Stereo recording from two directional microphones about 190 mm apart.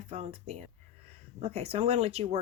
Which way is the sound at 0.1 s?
35° right (ahead or behind).